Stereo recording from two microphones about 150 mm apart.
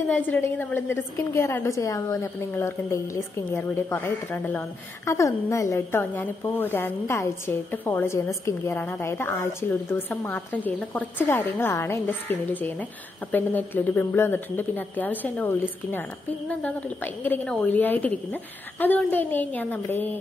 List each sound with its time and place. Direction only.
0.1 s a woman's voice: 10° left (ahead or behind)